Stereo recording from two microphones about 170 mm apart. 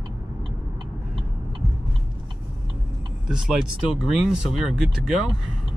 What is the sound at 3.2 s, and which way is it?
Speech, 5° right (ahead or behind).